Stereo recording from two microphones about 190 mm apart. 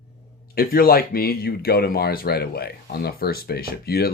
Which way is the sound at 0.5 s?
50° left (ahead or behind).